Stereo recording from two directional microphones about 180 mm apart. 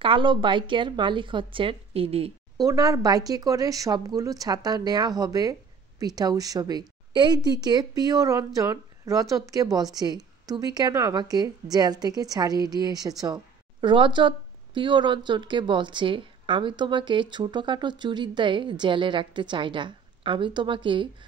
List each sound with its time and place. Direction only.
0.0 s a woman's voice: 30° right (ahead or behind)
2.6 s a woman's voice: 20° right (ahead or behind)